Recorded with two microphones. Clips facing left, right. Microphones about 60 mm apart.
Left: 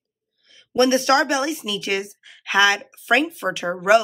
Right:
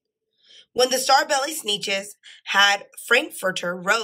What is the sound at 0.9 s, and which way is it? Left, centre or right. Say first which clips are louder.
A woman's voice: right 1 dB; centre.